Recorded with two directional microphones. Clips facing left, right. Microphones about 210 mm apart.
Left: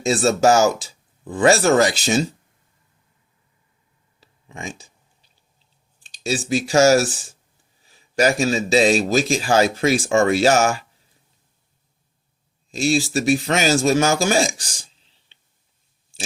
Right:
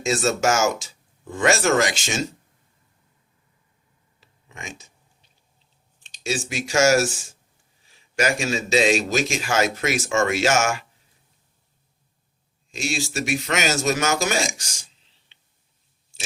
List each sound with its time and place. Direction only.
0.0 s a man's voice: 35° left (ahead or behind)
4.2 s a sound: 30° left (ahead or behind)
6.0 s a man's voice: 35° left (ahead or behind)
12.7 s a man's voice: 35° left (ahead or behind)
15.3 s whispering: 30° left (ahead or behind)